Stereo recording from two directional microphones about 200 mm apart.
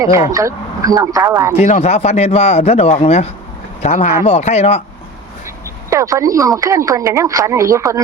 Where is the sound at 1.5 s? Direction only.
35° left (ahead or behind).